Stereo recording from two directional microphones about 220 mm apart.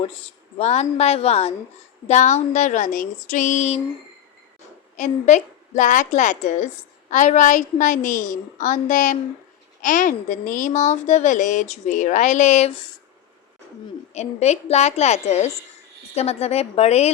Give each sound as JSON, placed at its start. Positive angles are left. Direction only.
{"t": 0.1, "sound": "a woman's voice", "side_deg": 25}
{"t": 4.9, "sound": "a woman's voice", "side_deg": 35}
{"t": 14.1, "sound": "a woman's voice", "side_deg": 30}